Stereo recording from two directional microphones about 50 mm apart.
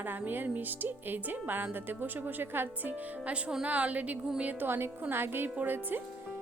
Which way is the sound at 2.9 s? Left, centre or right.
Right.